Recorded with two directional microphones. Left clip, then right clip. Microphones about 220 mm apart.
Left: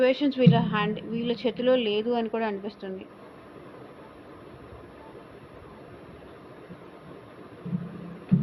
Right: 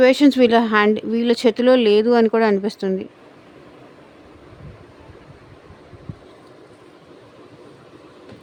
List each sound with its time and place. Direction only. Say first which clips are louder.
0.0 s speech: right 9 dB; 60° right (ahead or behind)